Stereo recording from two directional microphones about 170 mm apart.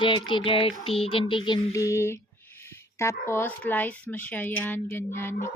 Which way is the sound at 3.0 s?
15° left (ahead or behind).